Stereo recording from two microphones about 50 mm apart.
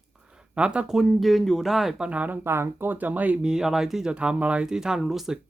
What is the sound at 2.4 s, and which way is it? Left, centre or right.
Speech, right.